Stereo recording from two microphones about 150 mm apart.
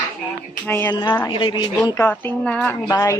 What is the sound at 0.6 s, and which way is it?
Speech, 15° left (ahead or behind).